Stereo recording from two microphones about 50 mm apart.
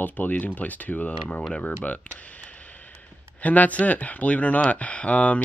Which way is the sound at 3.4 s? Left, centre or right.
Left.